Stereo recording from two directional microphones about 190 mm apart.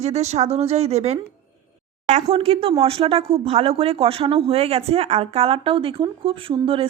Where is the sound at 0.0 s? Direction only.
35° right (ahead or behind).